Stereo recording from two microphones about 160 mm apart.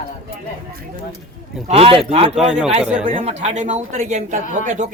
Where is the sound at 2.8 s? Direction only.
5° right (ahead or behind).